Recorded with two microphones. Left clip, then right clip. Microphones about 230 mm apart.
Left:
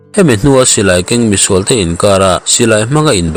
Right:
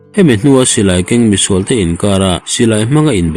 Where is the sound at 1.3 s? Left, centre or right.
Left.